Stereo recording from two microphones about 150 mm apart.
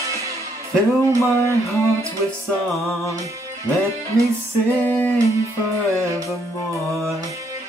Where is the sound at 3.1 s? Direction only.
20° right (ahead or behind).